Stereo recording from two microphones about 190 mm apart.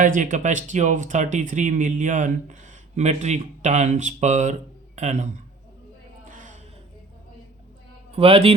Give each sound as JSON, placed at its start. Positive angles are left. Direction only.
{"t": 0.0, "sound": "speech", "side_deg": -45}
{"t": 6.3, "sound": "a sound", "side_deg": -40}
{"t": 8.1, "sound": "a man's voice", "side_deg": -30}